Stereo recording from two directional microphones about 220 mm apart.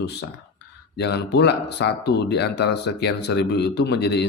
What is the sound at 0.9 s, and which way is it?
Speech, 50° left (ahead or behind).